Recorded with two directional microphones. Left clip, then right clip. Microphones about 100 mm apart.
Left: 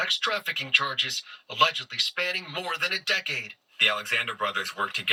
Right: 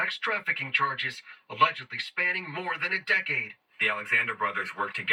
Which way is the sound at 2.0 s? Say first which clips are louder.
Even; 30° left (ahead or behind).